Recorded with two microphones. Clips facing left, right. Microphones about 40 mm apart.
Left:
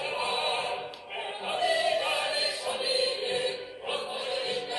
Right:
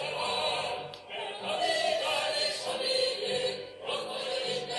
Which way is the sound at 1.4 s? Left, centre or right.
Centre.